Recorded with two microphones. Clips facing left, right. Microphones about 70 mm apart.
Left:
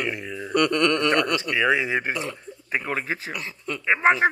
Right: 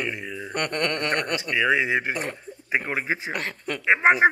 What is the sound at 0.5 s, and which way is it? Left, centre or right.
Chuckle, right.